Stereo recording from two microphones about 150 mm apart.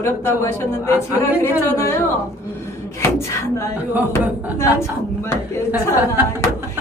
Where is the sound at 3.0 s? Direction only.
20° left (ahead or behind).